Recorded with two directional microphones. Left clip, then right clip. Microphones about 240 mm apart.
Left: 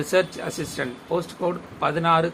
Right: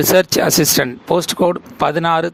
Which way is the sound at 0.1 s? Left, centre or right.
Right.